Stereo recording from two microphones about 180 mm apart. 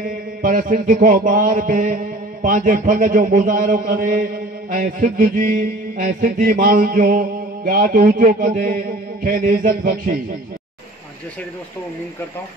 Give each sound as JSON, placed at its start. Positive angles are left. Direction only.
{"t": 0.4, "sound": "mantra", "side_deg": -50}